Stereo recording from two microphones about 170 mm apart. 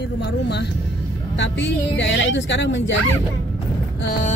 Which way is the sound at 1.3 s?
90° left.